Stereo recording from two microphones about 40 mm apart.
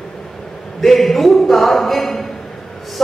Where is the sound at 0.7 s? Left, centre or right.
Centre.